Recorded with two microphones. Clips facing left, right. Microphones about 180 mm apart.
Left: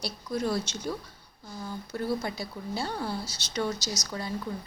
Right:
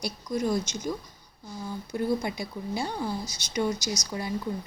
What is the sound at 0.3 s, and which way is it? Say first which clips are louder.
A woman's voice: right 2 dB; 15° right (ahead or behind).